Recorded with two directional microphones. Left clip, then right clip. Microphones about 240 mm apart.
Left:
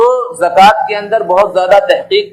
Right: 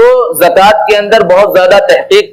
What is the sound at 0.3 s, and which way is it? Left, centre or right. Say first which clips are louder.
A man's voice: right 2 dB; right.